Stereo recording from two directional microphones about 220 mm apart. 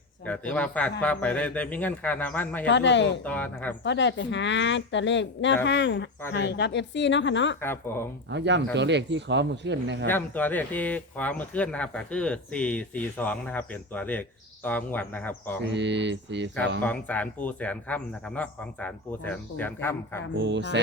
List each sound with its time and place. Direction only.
0.3 s speech: 5° left (ahead or behind)
2.6 s a woman's voice: 55° left (ahead or behind)
3.2 s speech: 5° left (ahead or behind)
3.8 s a woman's voice: 55° left (ahead or behind)
7.6 s speech: 10° left (ahead or behind)
8.3 s speech: 50° right (ahead or behind)
10.1 s speech: 10° left (ahead or behind)
15.6 s speech: 55° right (ahead or behind)
16.8 s speech: 5° left (ahead or behind)
20.4 s speech: 55° right (ahead or behind)